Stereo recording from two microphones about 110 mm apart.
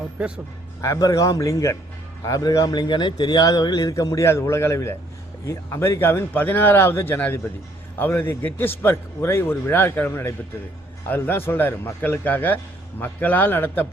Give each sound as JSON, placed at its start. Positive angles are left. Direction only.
{"t": 0.8, "sound": "a man's voice", "side_deg": 30}